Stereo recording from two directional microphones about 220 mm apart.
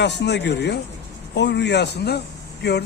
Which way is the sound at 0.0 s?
50° left (ahead or behind).